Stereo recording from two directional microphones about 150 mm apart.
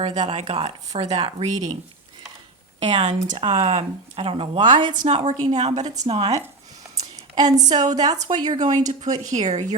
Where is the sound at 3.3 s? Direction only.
35° right (ahead or behind).